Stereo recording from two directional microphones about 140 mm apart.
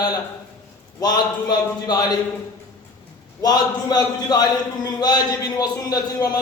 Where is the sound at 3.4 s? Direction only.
30° left (ahead or behind).